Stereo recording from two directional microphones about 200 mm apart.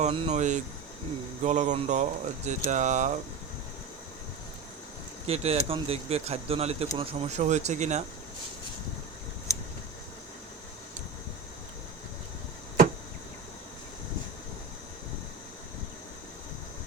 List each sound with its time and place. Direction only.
0.0 s speech: 30° right (ahead or behind)
5.2 s speech: 30° right (ahead or behind)
9.5 s a sound: 15° left (ahead or behind)